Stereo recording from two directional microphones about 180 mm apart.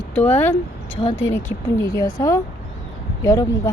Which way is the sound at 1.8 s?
20° left (ahead or behind).